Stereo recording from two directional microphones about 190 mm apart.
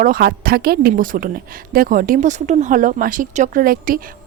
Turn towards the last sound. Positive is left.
turn(degrees=-50)  # may be behind; listen again after turning